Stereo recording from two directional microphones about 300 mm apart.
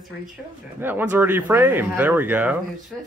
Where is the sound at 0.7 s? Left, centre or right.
Centre.